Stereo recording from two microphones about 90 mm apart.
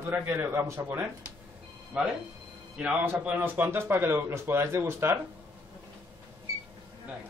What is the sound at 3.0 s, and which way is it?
A man's voice, 20° right (ahead or behind).